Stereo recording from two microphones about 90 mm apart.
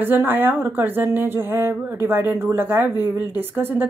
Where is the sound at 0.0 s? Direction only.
20° right (ahead or behind).